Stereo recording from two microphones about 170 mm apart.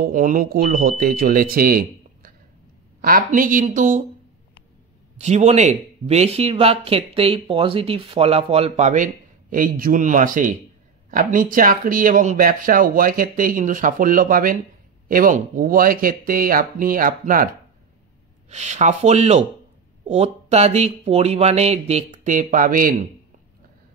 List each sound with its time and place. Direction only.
0.0 s speech: 50° right (ahead or behind)
5.2 s speech: 40° right (ahead or behind)
18.5 s speech: 40° right (ahead or behind)